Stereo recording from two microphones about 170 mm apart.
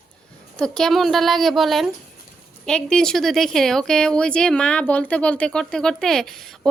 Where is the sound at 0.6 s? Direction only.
5° left (ahead or behind).